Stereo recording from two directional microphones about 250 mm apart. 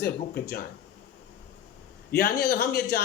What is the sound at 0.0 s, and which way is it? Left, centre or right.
Speech, left.